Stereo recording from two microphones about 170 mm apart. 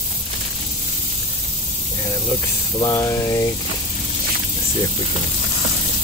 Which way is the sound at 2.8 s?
20° left (ahead or behind).